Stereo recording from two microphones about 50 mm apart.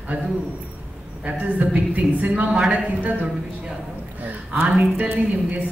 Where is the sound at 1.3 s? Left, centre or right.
Right.